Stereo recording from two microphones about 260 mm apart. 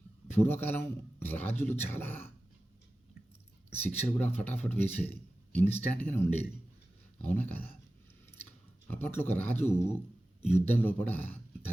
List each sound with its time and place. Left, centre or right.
0.3 s a man's voice: centre
3.8 s a man's voice: centre
8.9 s a man's voice: centre